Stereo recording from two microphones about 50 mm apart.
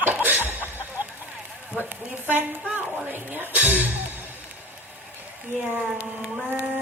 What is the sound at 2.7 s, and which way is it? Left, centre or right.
Speech, right.